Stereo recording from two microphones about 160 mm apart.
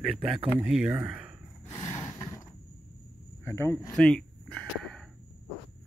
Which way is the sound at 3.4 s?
15° left (ahead or behind).